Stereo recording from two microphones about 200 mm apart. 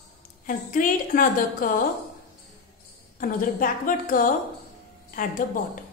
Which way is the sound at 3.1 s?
45° left (ahead or behind).